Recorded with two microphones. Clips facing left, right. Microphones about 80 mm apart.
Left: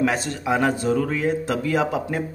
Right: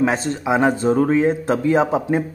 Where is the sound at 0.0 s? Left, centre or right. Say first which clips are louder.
Right 3 dB; right.